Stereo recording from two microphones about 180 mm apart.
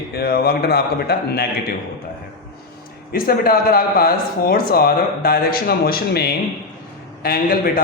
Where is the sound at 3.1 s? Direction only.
55° left (ahead or behind).